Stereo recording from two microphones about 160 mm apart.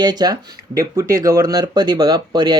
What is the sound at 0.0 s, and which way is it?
Speech, 25° right (ahead or behind).